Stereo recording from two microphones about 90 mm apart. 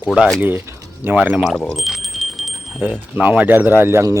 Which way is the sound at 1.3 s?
10° left (ahead or behind).